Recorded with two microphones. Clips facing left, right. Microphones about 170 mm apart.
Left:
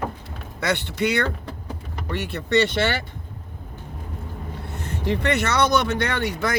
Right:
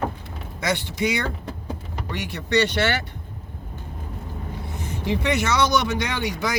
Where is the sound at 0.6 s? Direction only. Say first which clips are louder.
Left 1 dB; 65° left (ahead or behind).